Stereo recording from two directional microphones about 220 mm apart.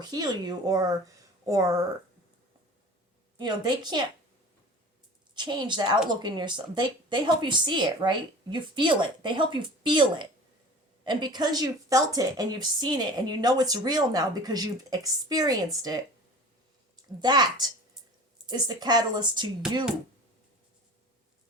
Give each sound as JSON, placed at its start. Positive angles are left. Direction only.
{"t": 0.0, "sound": "a woman's voice", "side_deg": -20}
{"t": 3.3, "sound": "a woman's voice", "side_deg": -20}
{"t": 5.3, "sound": "a woman's voice", "side_deg": -20}
{"t": 17.2, "sound": "a woman's voice", "side_deg": -20}